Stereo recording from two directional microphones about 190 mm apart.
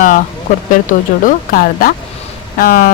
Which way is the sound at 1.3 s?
50° left (ahead or behind).